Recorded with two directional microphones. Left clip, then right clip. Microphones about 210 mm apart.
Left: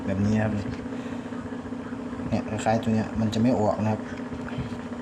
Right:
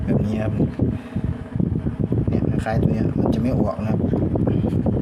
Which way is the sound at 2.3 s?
5° right (ahead or behind).